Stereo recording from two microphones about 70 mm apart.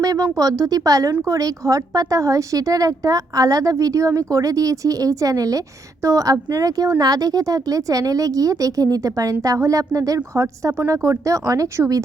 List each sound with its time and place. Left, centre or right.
0.0 s a woman's voice: right